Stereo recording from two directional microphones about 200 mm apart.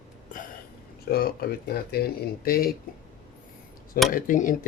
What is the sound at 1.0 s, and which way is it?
Speech, 50° left (ahead or behind).